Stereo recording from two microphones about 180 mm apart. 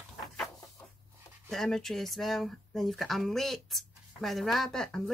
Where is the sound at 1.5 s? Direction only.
Centre (ahead or behind).